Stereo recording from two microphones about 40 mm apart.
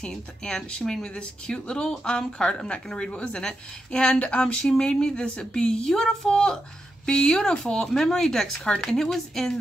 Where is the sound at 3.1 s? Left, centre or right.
Left.